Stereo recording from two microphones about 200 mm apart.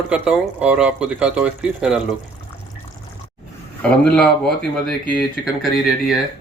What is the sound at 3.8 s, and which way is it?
Speech, 5° left (ahead or behind).